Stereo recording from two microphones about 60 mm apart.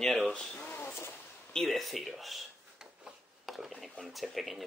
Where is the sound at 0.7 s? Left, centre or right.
Left.